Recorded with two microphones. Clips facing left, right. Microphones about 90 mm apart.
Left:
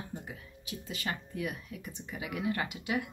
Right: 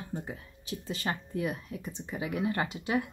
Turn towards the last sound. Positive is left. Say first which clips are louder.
# right 3 dB
turn(degrees=-30)  # may be behind; listen again after turning